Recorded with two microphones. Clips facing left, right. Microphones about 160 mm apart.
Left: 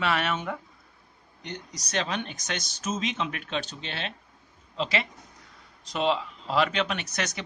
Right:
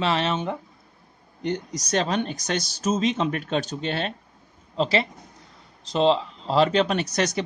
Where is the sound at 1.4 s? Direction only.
50° right (ahead or behind).